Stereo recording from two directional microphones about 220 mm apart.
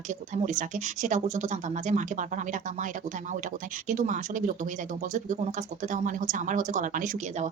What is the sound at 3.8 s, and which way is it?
Speech, 35° right (ahead or behind).